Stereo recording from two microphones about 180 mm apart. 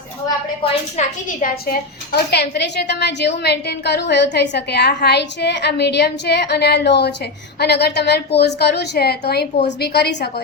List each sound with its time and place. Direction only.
0.6 s a woman's voice: 40° left (ahead or behind)
1.6 s a woman's voice: 60° left (ahead or behind)